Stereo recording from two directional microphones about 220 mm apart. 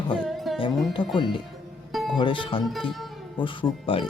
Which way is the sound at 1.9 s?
Centre (ahead or behind).